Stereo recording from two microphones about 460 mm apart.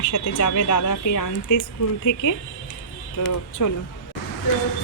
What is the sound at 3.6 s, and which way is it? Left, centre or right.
Speech, left.